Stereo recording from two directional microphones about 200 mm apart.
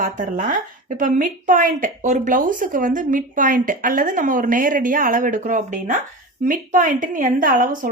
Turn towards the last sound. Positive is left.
turn(degrees=-45)  # may be behind; listen again after turning